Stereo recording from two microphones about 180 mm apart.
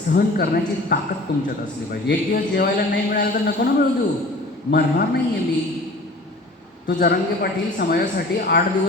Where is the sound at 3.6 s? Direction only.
70° left (ahead or behind).